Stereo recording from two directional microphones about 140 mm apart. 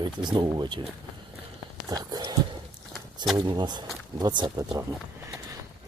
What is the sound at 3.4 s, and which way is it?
Speech, 35° right (ahead or behind).